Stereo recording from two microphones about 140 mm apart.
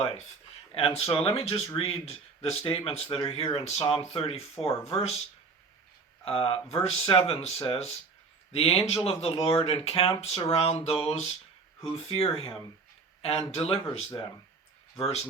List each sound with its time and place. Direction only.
0.7 s speech: 40° left (ahead or behind)
6.2 s speech: 45° left (ahead or behind)